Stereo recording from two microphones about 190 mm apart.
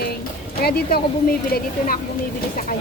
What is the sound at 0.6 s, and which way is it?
A woman's voice, 55° left (ahead or behind).